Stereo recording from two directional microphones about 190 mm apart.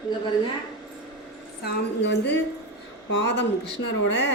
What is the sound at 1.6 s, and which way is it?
A woman's voice, 65° left (ahead or behind).